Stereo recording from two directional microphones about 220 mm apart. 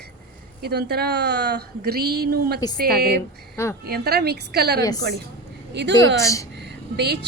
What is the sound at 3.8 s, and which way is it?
A woman's voice, 45° right (ahead or behind).